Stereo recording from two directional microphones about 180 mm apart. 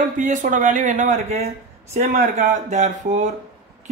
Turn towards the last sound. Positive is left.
turn(degrees=-40)  # may be behind; listen again after turning